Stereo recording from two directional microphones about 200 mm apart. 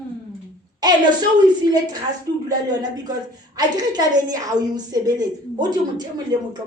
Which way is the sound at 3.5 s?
20° right (ahead or behind).